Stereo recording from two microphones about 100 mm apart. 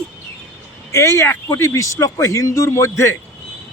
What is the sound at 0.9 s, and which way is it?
A man's voice, 25° left (ahead or behind).